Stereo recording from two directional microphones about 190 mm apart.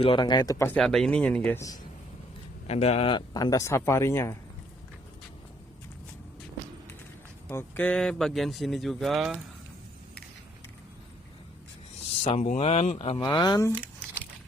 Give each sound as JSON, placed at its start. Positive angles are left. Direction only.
{"t": 0.0, "sound": "speech", "side_deg": 25}
{"t": 0.8, "sound": "speech", "side_deg": 5}
{"t": 2.6, "sound": "speech", "side_deg": 35}
{"t": 7.4, "sound": "speech", "side_deg": 5}
{"t": 12.2, "sound": "speech", "side_deg": 35}